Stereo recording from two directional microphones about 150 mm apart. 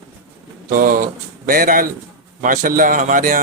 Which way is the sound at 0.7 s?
65° right (ahead or behind).